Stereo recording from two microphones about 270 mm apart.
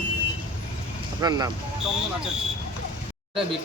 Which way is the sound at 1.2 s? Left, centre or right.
Centre.